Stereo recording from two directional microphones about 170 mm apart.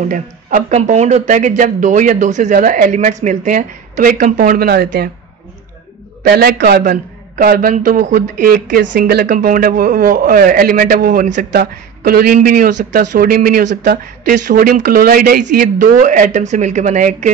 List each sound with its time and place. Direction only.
0.1 s a man's voice: 50° right (ahead or behind); by 5.1 s 75° right (ahead or behind)
6.2 s a man's voice: 65° right (ahead or behind); by 11.4 s 50° right (ahead or behind)
11.5 s a man's voice: 60° right (ahead or behind)